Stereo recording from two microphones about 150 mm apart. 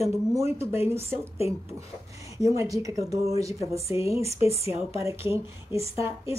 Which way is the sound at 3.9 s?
35° left (ahead or behind).